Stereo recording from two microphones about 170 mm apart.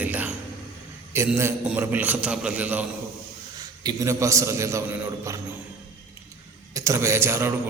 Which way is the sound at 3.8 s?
20° right (ahead or behind).